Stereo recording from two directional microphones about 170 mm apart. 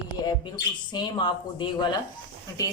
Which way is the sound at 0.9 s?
25° left (ahead or behind).